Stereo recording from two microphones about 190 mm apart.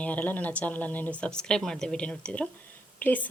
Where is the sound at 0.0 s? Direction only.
5° left (ahead or behind).